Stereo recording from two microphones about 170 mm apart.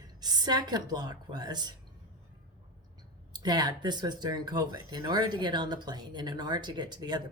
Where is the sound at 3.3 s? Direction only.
25° right (ahead or behind).